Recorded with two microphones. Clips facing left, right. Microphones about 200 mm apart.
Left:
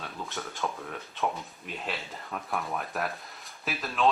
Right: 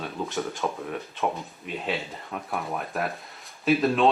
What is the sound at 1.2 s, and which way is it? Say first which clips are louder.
Speech: right 1 dB; centre (ahead or behind).